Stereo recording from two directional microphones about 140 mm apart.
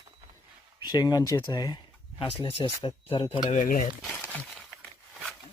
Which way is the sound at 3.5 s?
75° left (ahead or behind).